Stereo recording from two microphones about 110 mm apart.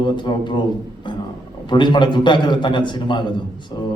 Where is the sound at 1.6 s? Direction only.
45° left (ahead or behind).